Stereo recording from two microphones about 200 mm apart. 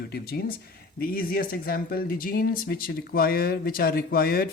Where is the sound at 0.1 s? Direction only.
50° left (ahead or behind).